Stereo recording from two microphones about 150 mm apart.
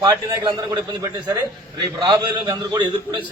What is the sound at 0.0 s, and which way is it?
A man's voice, 30° right (ahead or behind).